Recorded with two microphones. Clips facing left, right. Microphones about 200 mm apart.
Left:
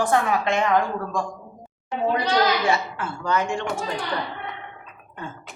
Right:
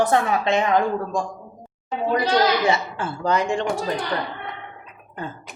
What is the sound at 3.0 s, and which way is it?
Speech, 30° right (ahead or behind).